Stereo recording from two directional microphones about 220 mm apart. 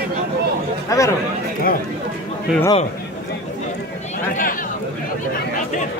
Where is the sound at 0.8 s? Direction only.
15° left (ahead or behind).